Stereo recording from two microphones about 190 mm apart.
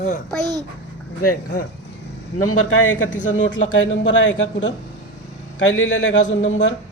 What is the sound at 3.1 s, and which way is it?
Speech, 40° left (ahead or behind).